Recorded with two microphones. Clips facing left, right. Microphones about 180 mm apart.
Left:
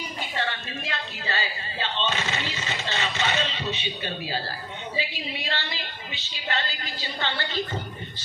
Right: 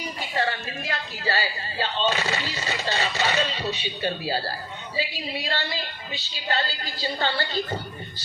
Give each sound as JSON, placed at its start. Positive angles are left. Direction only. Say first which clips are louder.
{"t": 0.3, "sound": "speech", "louder": "right 5 dB", "side_deg": -40}